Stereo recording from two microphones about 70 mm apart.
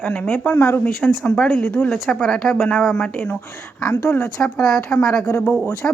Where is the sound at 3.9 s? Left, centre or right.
Left.